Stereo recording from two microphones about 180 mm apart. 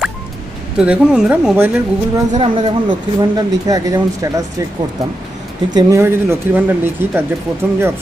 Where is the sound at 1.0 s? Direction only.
5° right (ahead or behind).